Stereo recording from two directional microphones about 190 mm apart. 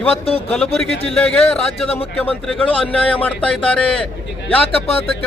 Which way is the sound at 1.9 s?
30° left (ahead or behind).